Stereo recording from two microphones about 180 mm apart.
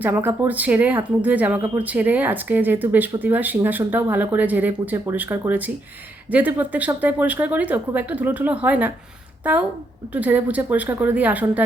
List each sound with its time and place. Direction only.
0.0 s a woman's voice: 10° right (ahead or behind)